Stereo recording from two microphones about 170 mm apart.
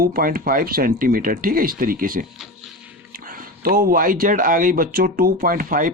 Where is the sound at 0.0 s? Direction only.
60° right (ahead or behind).